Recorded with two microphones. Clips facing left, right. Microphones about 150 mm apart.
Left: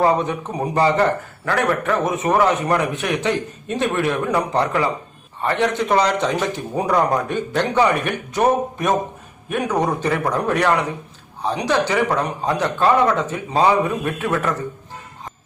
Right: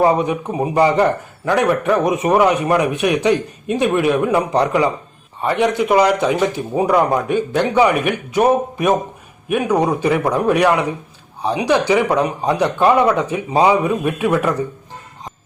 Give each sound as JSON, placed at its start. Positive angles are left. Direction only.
{"t": 0.0, "sound": "a man's voice", "side_deg": -10}